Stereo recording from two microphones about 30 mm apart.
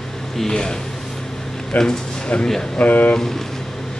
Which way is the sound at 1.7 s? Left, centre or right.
Left.